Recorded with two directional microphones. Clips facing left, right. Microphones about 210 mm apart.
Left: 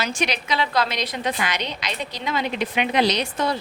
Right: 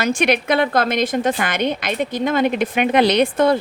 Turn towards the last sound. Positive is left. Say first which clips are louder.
# right 8 dB
turn(degrees=-55)  # may be behind; listen again after turning